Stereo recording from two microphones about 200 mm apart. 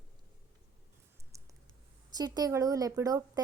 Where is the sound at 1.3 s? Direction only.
15° right (ahead or behind).